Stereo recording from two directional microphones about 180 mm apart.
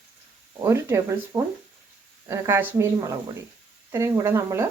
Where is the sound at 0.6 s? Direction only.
15° right (ahead or behind).